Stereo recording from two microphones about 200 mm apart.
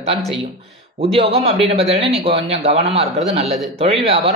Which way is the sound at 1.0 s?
30° right (ahead or behind).